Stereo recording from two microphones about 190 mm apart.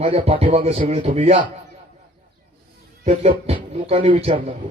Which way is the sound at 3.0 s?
30° right (ahead or behind).